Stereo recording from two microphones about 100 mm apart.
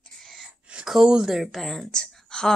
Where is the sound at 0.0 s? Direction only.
5° left (ahead or behind).